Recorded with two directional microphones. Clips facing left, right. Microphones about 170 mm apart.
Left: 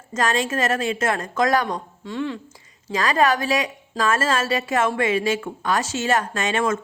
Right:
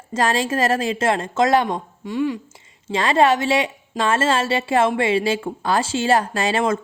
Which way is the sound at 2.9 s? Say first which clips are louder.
Right 3 dB; 25° right (ahead or behind).